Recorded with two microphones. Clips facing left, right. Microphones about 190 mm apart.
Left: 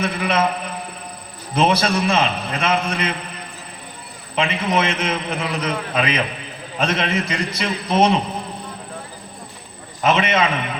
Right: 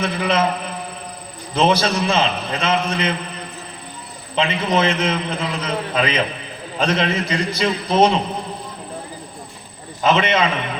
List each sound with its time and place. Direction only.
0.0 s a man's voice: 30° right (ahead or behind)
1.5 s a man's voice: 30° right (ahead or behind)
4.4 s a man's voice: 30° right (ahead or behind)
10.0 s a man's voice: 30° right (ahead or behind)